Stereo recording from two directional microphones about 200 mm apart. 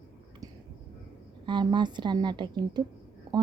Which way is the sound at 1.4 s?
20° right (ahead or behind).